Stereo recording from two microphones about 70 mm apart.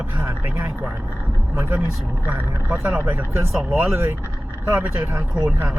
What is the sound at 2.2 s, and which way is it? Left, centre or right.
Speech, right.